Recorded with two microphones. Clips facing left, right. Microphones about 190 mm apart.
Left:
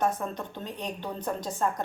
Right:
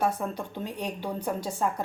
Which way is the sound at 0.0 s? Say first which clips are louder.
Right 1 dB; 10° right (ahead or behind).